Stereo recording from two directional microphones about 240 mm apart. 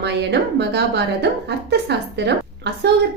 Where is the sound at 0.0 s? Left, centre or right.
Right.